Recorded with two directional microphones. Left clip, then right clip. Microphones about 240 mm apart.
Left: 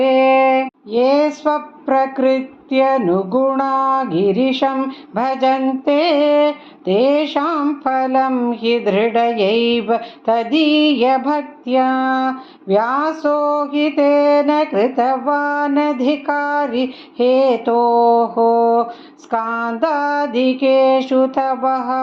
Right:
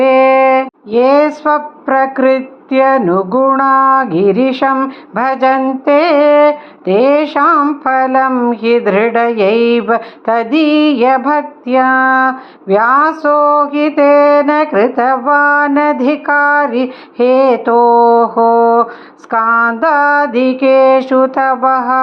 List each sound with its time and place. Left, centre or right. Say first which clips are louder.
0.0 s speech: right 5 dB; centre